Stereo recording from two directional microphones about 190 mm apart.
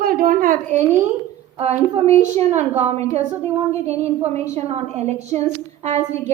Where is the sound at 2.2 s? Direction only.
35° right (ahead or behind).